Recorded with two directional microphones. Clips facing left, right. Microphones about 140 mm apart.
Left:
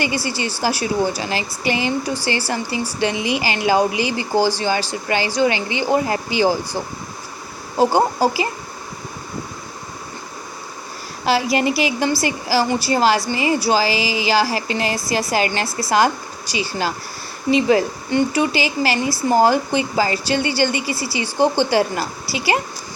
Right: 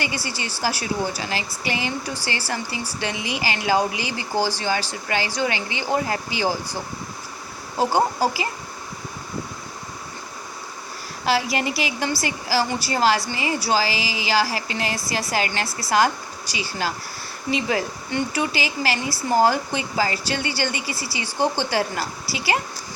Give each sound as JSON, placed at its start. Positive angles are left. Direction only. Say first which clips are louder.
{"t": 0.0, "sound": "speech", "louder": "left 6 dB", "side_deg": 20}
{"t": 7.8, "sound": "speech", "louder": "left 4 dB", "side_deg": 25}
{"t": 11.3, "sound": "speech", "louder": "left 5 dB", "side_deg": 20}